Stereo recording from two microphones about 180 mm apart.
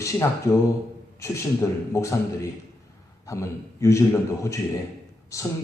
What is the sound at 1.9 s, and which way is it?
A man's voice, 15° left (ahead or behind).